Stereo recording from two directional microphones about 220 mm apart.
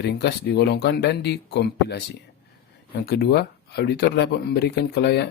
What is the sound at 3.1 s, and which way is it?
Speech, 45° left (ahead or behind).